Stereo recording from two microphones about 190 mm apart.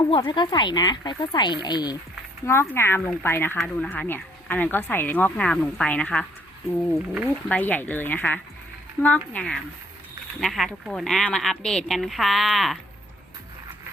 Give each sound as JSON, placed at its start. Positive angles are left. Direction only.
{"t": 0.1, "sound": "a woman's voice", "side_deg": 25}
{"t": 7.5, "sound": "a woman's voice", "side_deg": 10}